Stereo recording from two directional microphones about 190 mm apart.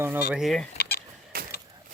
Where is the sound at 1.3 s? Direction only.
50° right (ahead or behind).